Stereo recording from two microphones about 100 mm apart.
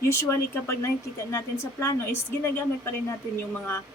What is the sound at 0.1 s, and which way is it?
Speech, 25° left (ahead or behind).